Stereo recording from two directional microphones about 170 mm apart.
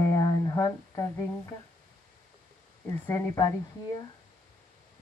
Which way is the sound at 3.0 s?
15° left (ahead or behind).